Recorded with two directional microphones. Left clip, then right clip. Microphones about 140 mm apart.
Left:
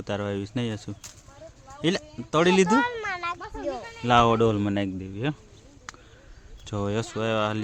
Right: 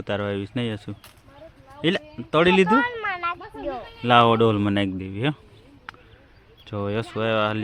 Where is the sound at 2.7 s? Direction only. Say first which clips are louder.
Right 3 dB; 30° left (ahead or behind).